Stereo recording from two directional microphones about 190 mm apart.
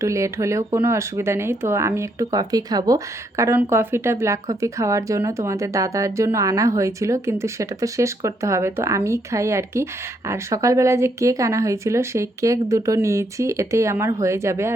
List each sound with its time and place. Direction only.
0.0 s speech: 15° right (ahead or behind)